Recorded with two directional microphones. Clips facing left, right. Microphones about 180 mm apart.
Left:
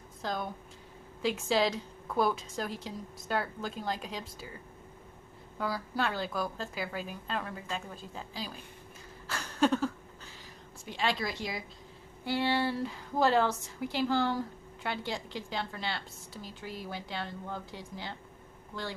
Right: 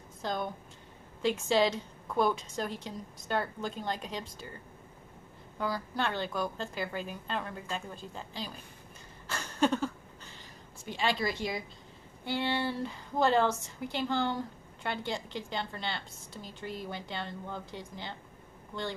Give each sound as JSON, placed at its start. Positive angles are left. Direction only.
{"t": 0.2, "sound": "a woman's voice", "side_deg": 0}
{"t": 5.6, "sound": "a woman's voice", "side_deg": 5}
{"t": 9.3, "sound": "a sound", "side_deg": 0}
{"t": 10.9, "sound": "a woman's voice", "side_deg": 0}